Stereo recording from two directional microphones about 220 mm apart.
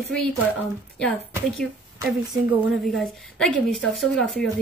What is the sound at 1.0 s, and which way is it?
Speech, 5° left (ahead or behind).